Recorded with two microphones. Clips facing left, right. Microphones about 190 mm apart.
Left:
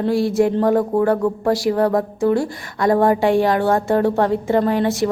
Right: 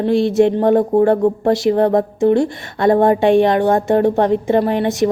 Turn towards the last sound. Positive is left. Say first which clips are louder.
# right 2 dB
turn(degrees=-20)  # may be behind; listen again after turning